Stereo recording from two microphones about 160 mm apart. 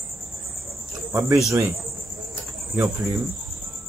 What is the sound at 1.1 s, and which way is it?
Speech, 15° right (ahead or behind).